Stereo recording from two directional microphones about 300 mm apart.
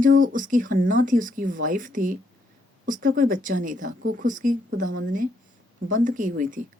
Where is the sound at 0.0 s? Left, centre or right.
Right.